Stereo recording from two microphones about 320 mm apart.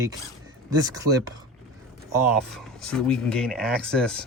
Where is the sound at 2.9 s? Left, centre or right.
Centre.